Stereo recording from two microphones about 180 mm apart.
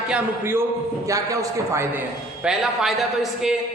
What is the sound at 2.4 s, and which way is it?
Speech, 5° right (ahead or behind).